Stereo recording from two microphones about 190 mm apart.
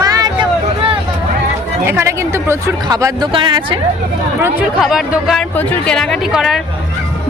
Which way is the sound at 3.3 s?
25° right (ahead or behind).